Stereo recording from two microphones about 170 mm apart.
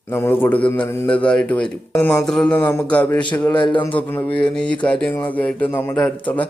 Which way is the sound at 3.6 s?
25° left (ahead or behind).